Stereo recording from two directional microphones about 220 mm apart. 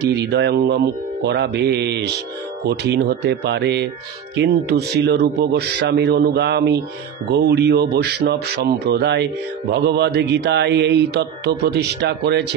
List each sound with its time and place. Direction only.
0.0 s speech: 50° right (ahead or behind)